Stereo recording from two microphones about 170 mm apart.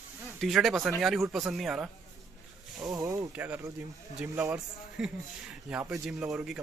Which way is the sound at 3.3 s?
10° right (ahead or behind).